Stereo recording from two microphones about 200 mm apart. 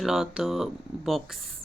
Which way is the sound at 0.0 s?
Centre (ahead or behind).